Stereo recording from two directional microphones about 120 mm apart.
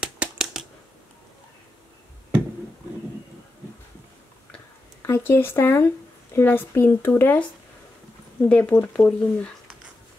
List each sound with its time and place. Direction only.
0.0 s a sound: 5° right (ahead or behind)
5.0 s speech: 20° left (ahead or behind)
8.5 s speech: 15° left (ahead or behind)